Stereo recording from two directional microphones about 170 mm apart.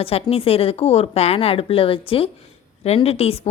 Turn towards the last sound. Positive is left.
turn(degrees=35)  # may be behind; listen again after turning